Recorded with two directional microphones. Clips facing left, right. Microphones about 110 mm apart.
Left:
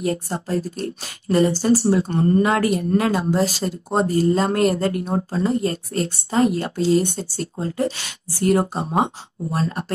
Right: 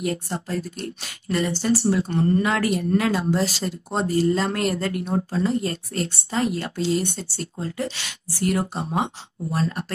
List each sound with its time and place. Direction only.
0.0 s speech: 35° left (ahead or behind)